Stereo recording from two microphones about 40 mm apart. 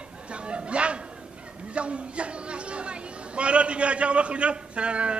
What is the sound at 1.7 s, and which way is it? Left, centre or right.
Speech, right.